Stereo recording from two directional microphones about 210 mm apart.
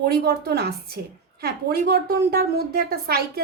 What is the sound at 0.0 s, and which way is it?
A woman's voice, 50° right (ahead or behind).